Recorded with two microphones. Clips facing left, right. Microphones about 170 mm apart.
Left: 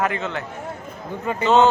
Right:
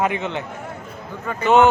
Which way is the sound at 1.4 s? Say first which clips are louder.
Right 2 dB; 15° right (ahead or behind).